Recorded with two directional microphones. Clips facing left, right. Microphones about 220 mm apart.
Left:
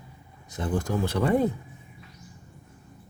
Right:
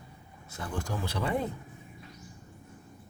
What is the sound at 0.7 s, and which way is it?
Speech, 50° left (ahead or behind).